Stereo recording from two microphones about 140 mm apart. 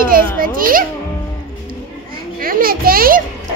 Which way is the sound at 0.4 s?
90° right.